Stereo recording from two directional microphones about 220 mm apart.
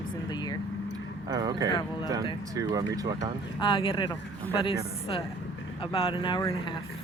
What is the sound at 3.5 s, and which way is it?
Speech, 20° left (ahead or behind).